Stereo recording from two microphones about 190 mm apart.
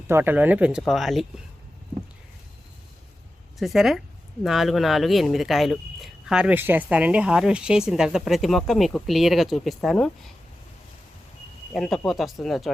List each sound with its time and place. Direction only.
0.1 s speech: 10° right (ahead or behind)
3.6 s speech: centre (ahead or behind)
11.7 s speech: centre (ahead or behind)